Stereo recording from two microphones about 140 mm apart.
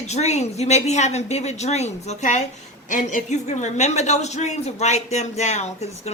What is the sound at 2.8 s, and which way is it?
Speech, 65° left (ahead or behind).